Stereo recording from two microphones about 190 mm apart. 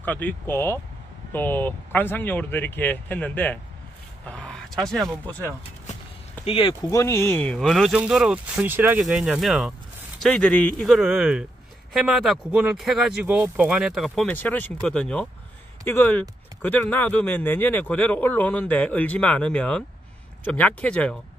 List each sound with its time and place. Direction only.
0.0 s speech: 10° left (ahead or behind)
6.4 s speech: 30° left (ahead or behind)
6.9 s speech: 15° left (ahead or behind)